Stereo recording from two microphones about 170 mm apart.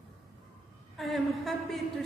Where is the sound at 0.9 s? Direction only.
Centre (ahead or behind).